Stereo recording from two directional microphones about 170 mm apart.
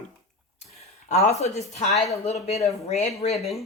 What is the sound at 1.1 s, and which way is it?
Speech, 45° left (ahead or behind).